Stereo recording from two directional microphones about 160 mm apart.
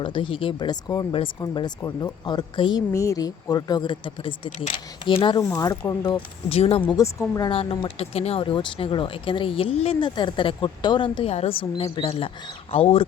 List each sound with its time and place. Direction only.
0.0 s speech: 30° left (ahead or behind)
5.4 s speech: 20° left (ahead or behind)
6.5 s speech: 40° left (ahead or behind)
6.9 s speech: 20° left (ahead or behind)
7.5 s speech: 35° left (ahead or behind)